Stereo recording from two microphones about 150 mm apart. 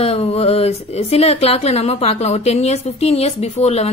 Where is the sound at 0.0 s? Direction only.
40° left (ahead or behind).